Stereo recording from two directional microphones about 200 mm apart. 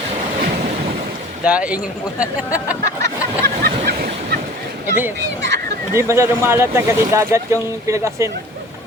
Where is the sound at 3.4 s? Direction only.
50° right (ahead or behind).